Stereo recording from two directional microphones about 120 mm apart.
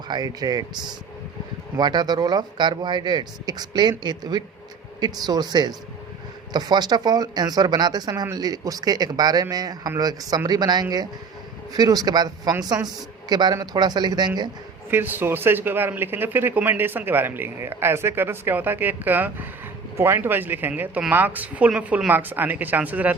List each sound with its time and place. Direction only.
0.1 s speech: 35° right (ahead or behind)
14.8 s speech: 15° right (ahead or behind)